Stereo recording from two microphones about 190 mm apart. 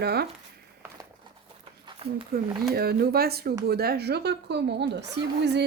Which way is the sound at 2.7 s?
55° right (ahead or behind).